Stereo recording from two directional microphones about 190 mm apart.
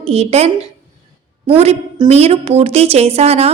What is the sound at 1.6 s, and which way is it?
A woman's voice, 30° right (ahead or behind).